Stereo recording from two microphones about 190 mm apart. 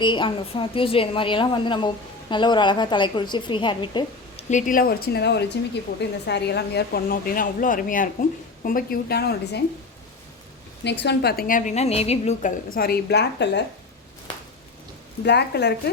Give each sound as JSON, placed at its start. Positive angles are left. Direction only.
{"t": 0.0, "sound": "a woman's voice", "side_deg": 25}
{"t": 4.4, "sound": "a woman's voice", "side_deg": 40}
{"t": 10.8, "sound": "a woman's voice", "side_deg": 65}
{"t": 15.2, "sound": "speech", "side_deg": 60}